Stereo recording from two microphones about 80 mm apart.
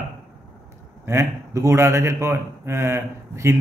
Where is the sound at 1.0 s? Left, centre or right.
Right.